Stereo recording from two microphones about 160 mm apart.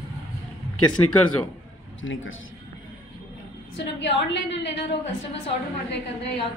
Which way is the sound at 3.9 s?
90° left.